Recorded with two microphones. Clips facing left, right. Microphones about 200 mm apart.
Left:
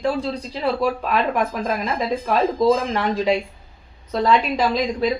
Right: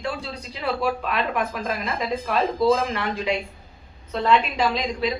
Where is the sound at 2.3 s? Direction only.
40° left (ahead or behind).